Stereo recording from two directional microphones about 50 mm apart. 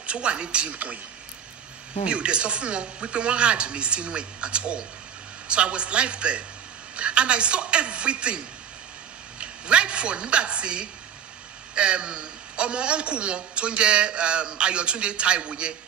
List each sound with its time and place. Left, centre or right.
0.0 s a man's voice: right
2.0 s a man's voice: right